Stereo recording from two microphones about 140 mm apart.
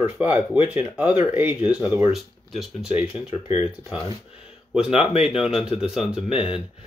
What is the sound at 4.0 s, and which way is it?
Speech, 40° left (ahead or behind).